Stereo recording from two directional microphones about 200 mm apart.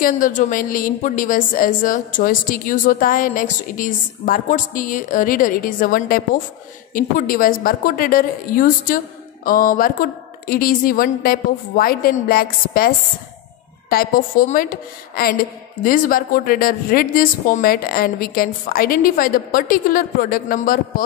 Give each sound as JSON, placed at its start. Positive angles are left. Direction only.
{"t": 0.0, "sound": "a woman's voice", "side_deg": 40}